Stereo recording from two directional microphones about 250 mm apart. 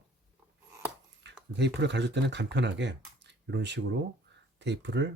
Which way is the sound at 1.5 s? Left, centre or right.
Right.